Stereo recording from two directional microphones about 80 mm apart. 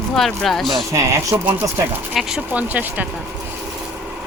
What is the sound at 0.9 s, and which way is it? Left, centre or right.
Speech, right.